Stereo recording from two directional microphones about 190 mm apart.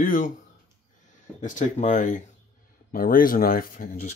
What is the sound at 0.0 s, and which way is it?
Speech, 45° left (ahead or behind).